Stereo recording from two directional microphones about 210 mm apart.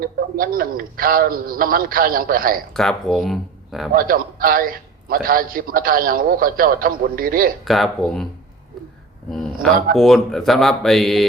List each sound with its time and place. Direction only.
0.0 s a man's voice: 45° right (ahead or behind)
2.7 s speech: centre (ahead or behind)
3.9 s a man's voice: 45° right (ahead or behind)
7.6 s speech: centre (ahead or behind)
9.3 s speech: centre (ahead or behind)